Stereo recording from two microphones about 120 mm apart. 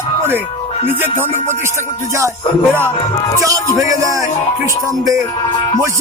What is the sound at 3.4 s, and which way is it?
Speech, 30° right (ahead or behind).